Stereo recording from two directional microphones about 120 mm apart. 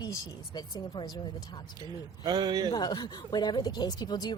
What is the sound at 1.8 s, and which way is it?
Speech, 35° right (ahead or behind).